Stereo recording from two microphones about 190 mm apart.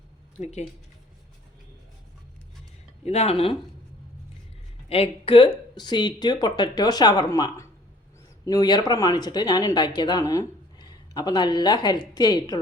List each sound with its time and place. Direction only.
0.3 s speech: 35° left (ahead or behind)
3.0 s speech: 35° left (ahead or behind)
4.9 s speech: 30° left (ahead or behind)